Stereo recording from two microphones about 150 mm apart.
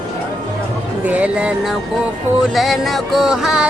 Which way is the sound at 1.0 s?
10° right (ahead or behind).